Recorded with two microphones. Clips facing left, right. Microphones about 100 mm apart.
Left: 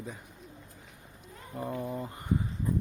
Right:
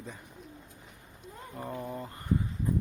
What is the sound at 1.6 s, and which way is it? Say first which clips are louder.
Speech: left 3 dB; centre (ahead or behind).